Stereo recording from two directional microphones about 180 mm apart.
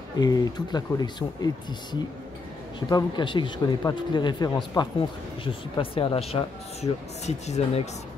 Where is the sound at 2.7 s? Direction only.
25° left (ahead or behind).